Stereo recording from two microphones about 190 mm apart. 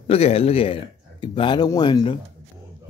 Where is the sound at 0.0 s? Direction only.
30° left (ahead or behind).